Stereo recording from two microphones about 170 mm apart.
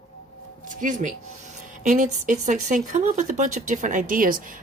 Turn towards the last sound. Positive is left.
turn(degrees=-55)  # may be behind; listen again after turning